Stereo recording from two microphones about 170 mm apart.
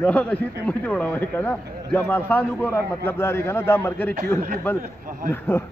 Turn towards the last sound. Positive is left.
turn(degrees=15)  # may be behind; listen again after turning